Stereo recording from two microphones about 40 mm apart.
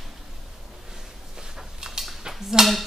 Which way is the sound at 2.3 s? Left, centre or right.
Centre.